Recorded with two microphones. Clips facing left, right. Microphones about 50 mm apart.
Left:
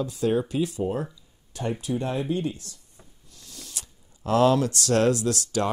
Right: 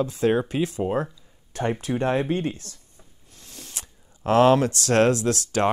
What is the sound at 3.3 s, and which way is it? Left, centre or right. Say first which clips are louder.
Speech: right 1 dB; right.